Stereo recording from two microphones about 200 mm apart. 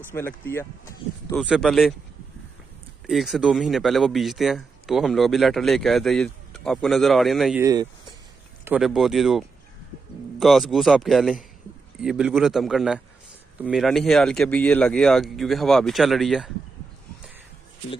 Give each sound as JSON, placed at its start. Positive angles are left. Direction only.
{"t": 0.1, "sound": "speech", "side_deg": 10}
{"t": 1.3, "sound": "speech", "side_deg": 0}
{"t": 3.1, "sound": "speech", "side_deg": 0}
{"t": 7.6, "sound": "speech", "side_deg": -20}
{"t": 8.6, "sound": "speech", "side_deg": -5}
{"t": 10.4, "sound": "speech", "side_deg": 0}